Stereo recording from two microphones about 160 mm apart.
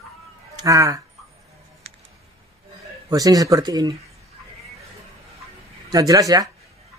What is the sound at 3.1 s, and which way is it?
Speech, 20° right (ahead or behind).